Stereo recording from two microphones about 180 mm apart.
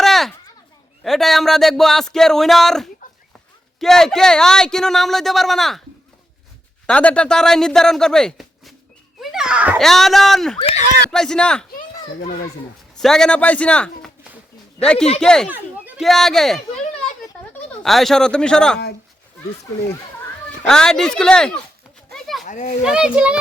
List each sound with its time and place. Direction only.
0.0 s children playing: centre (ahead or behind)
1.0 s speech: centre (ahead or behind)
6.8 s speech: 5° left (ahead or behind)
10.6 s speech: 30° left (ahead or behind)
11.1 s speech: 5° left (ahead or behind)
13.0 s speech: 5° left (ahead or behind)
15.4 s chatter: 10° right (ahead or behind)
16.0 s speech: centre (ahead or behind)
17.8 s speech: centre (ahead or behind)
20.7 s speech: 5° left (ahead or behind)
22.1 s a sound: centre (ahead or behind)
22.4 s speech: 45° left (ahead or behind)
22.8 s speech: 5° right (ahead or behind)